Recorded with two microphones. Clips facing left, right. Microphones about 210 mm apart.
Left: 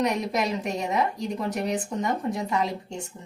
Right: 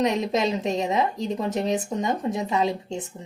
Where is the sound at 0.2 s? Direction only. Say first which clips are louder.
Right 3 dB; 25° right (ahead or behind).